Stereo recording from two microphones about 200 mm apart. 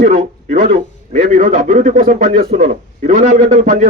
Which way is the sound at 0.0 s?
45° right (ahead or behind).